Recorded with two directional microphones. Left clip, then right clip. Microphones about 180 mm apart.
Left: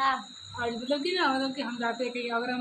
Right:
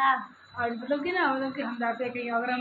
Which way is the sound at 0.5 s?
25° left (ahead or behind).